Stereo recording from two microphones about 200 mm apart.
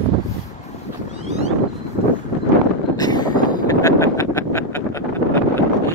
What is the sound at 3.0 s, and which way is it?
Vehicle, 20° left (ahead or behind).